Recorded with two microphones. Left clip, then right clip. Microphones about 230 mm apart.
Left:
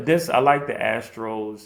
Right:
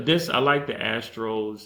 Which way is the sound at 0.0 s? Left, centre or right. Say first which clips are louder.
Left 3 dB; centre.